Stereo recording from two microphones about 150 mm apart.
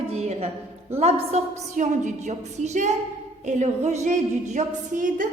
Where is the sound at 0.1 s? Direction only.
45° right (ahead or behind).